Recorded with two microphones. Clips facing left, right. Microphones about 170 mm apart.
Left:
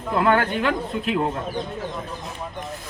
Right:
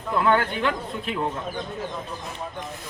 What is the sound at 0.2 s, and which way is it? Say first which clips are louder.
Speech: left 2 dB; 50° left (ahead or behind).